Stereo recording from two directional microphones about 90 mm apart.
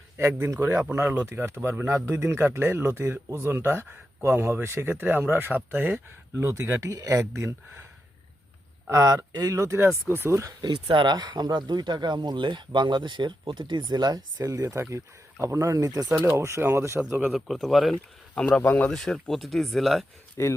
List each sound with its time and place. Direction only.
0.2 s speech: 30° right (ahead or behind)
6.5 s speech: 35° right (ahead or behind)
8.9 s speech: 35° right (ahead or behind)
9.3 s speech: 50° right (ahead or behind)
9.6 s speech: 30° right (ahead or behind)
10.6 s speech: 60° right (ahead or behind); by 16.0 s 40° right (ahead or behind)
16.1 s speech: 30° right (ahead or behind)
17.3 s speech: centre (ahead or behind)
18.3 s speech: 10° left (ahead or behind)
18.9 s speech: 5° left (ahead or behind)
20.4 s speech: 30° left (ahead or behind)